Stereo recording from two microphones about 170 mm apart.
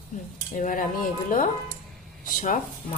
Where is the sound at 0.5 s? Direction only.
50° left (ahead or behind).